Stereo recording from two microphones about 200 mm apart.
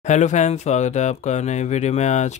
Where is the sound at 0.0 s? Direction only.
35° left (ahead or behind).